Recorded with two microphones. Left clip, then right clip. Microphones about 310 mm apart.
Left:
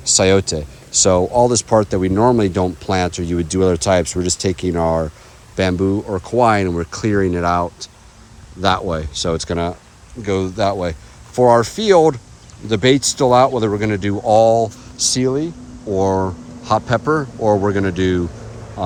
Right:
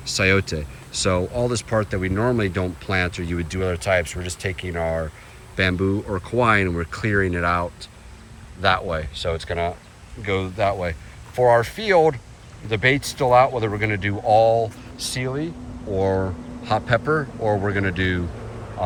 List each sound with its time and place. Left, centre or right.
0.0 s speech: centre
4.7 s speech: left
5.5 s speech: centre